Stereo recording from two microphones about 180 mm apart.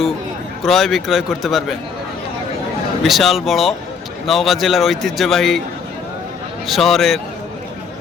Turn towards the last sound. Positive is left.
turn(degrees=0)  # may be behind; listen again after turning